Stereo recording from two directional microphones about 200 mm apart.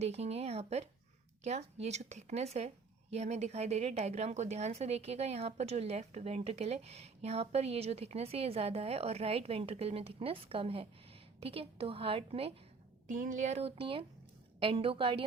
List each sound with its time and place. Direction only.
0.0 s a woman's voice: 30° right (ahead or behind)